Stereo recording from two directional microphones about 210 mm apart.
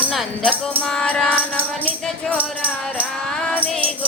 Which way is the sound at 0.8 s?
5° left (ahead or behind).